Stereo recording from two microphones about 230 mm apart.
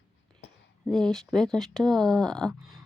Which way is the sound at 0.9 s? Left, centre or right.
Centre.